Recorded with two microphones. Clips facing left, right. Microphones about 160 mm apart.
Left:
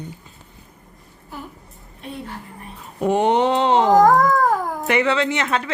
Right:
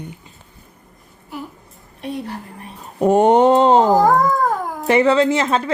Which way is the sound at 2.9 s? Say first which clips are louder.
Right 5 dB; 45° right (ahead or behind).